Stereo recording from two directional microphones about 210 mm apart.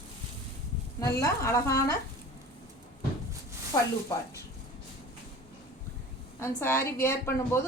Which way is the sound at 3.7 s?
15° left (ahead or behind).